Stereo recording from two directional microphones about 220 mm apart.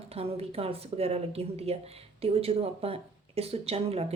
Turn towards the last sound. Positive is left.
turn(degrees=-25)  # may be behind; listen again after turning